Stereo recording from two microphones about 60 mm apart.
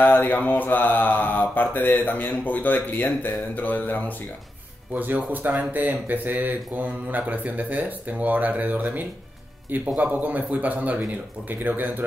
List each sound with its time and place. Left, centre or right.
0.0 s mantra: left
4.9 s speech: right